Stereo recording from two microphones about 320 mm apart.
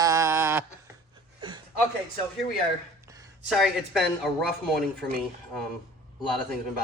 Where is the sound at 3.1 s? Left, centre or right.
Centre.